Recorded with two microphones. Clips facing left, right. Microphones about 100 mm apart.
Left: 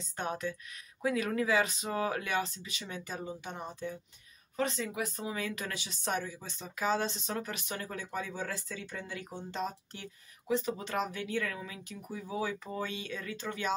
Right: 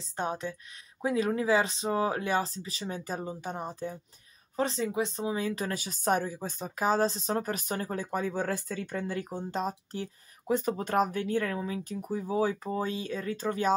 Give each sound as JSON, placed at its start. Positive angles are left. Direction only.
{"t": 0.1, "sound": "speech", "side_deg": -30}